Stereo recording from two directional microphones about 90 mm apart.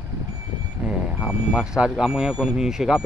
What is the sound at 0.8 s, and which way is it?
Speech, 5° right (ahead or behind).